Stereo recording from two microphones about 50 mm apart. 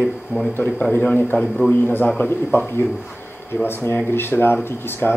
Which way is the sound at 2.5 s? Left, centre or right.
Left.